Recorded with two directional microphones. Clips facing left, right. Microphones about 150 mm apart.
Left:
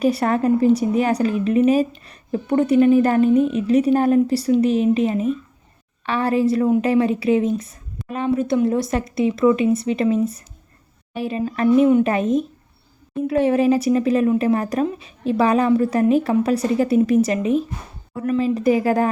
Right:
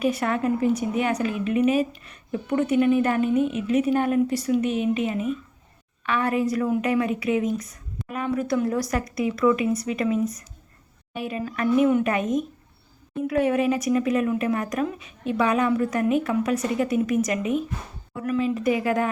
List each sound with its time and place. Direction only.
0.0 s a woman's voice: 35° left (ahead or behind)